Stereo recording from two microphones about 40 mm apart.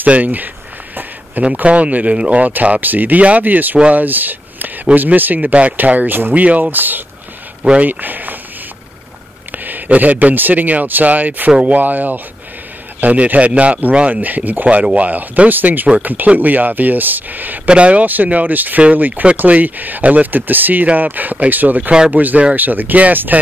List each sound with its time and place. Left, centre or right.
0.0 s speech: right
1.4 s a man's voice: right
2.5 s speech: right
6.4 s a man's voice: right
6.7 s speech: right
9.5 s a man's voice: right
14.1 s speech: right
17.6 s speech: right
18.0 s speech: right